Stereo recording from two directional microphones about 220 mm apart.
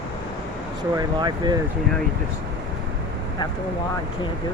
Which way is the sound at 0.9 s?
20° right (ahead or behind).